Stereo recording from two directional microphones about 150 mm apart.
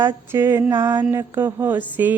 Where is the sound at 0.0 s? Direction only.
15° right (ahead or behind).